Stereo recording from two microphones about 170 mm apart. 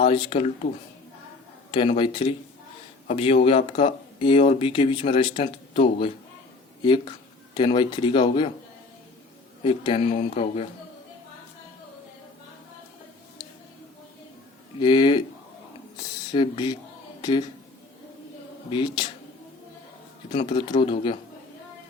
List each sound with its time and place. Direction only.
0.0 s speech: 30° left (ahead or behind)
1.7 s speech: 30° left (ahead or behind)
9.6 s speech: 30° left (ahead or behind)
14.8 s speech: 25° left (ahead or behind)
16.3 s speech: 30° left (ahead or behind)
18.7 s speech: 30° left (ahead or behind)
20.3 s speech: 30° left (ahead or behind)